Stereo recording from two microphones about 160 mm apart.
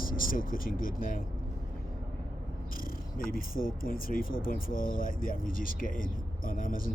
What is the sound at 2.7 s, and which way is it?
Speech, 65° left (ahead or behind).